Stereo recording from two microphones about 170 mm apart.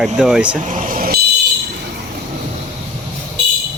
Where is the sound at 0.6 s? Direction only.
50° right (ahead or behind).